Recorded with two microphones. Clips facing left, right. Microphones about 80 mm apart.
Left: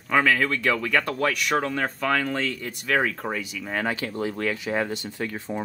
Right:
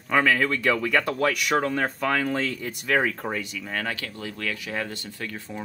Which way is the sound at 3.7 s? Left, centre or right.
Centre.